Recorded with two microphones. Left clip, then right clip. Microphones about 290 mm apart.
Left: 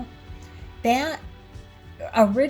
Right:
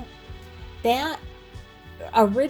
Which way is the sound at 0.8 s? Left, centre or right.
Right.